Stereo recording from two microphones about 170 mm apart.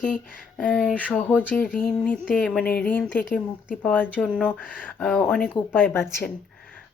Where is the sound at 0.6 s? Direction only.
5° left (ahead or behind).